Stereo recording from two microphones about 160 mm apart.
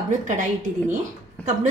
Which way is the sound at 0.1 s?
50° right (ahead or behind).